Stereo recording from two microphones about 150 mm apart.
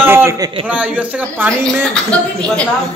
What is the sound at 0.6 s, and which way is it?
Speech, 10° right (ahead or behind).